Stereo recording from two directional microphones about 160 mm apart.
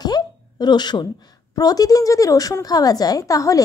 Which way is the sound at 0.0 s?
25° left (ahead or behind).